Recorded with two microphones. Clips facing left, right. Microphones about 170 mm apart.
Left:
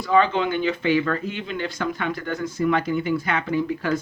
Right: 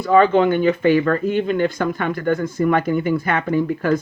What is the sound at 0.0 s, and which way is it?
Speech, 50° right (ahead or behind).